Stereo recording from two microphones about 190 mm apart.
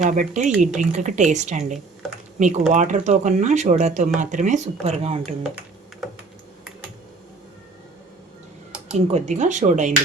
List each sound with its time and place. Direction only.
0.0 s speech: 40° right (ahead or behind)
2.0 s speech: centre (ahead or behind)
2.4 s speech: 40° right (ahead or behind)
5.4 s typing: centre (ahead or behind)
9.0 s speech: 35° right (ahead or behind)